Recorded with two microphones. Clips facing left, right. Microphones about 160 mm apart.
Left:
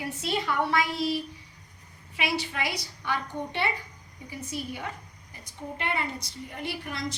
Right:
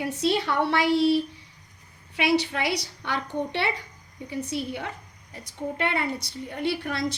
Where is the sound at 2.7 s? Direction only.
70° right (ahead or behind).